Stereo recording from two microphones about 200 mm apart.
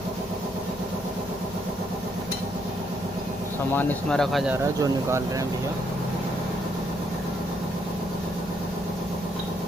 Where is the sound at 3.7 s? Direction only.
5° left (ahead or behind).